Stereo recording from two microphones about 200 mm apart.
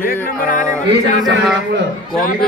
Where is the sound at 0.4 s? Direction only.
40° left (ahead or behind).